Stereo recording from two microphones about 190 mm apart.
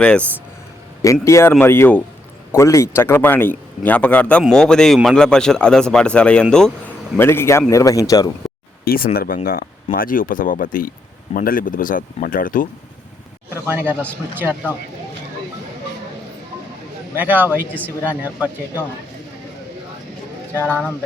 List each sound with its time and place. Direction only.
0.0 s a man's voice: 5° left (ahead or behind)
1.0 s a man's voice: 15° left (ahead or behind)
8.8 s speech: 50° left (ahead or behind)
13.7 s speech: 10° right (ahead or behind)
17.2 s speech: 10° right (ahead or behind)
20.5 s speech: 10° right (ahead or behind)